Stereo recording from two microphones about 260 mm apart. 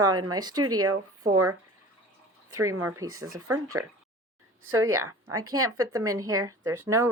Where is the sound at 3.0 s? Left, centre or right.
Right.